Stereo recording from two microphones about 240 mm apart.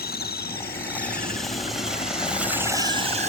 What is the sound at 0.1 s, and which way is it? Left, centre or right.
Vehicle, left.